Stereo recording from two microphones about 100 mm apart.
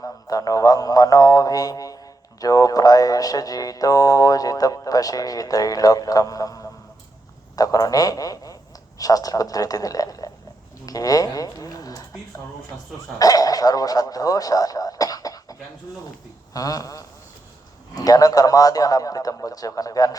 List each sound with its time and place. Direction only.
0.0 s a man's voice: 35° left (ahead or behind)
13.1 s dog: 35° left (ahead or behind)
16.5 s a man's voice: 35° left (ahead or behind)